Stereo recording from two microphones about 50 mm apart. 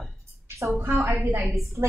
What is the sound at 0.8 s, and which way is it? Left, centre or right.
Speech, right.